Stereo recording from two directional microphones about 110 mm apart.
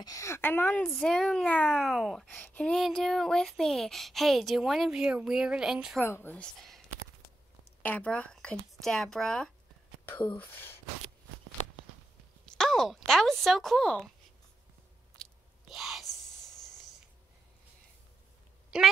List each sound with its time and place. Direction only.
0.0 s a woman's voice: 30° left (ahead or behind)
0.8 s speech: centre (ahead or behind)
2.2 s speech: 15° left (ahead or behind); by 6.0 s 5° right (ahead or behind)
6.0 s a woman's voice: 20° left (ahead or behind)
6.3 s speech: 10° left (ahead or behind)
7.8 s speech: 15° left (ahead or behind)
10.3 s a woman's voice: 20° left (ahead or behind)
12.5 s speech: 5° left (ahead or behind)
15.7 s a sound: centre (ahead or behind)
18.7 s a woman's voice: 5° right (ahead or behind)